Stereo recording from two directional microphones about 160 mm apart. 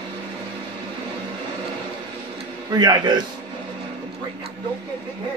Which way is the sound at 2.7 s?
25° right (ahead or behind).